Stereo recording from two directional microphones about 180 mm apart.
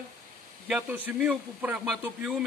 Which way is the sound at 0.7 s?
5° right (ahead or behind).